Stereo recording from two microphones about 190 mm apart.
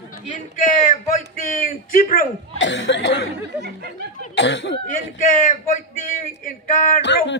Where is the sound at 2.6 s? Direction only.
70° left (ahead or behind).